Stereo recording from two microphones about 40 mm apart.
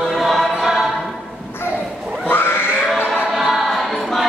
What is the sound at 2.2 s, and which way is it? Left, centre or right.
Pig, left.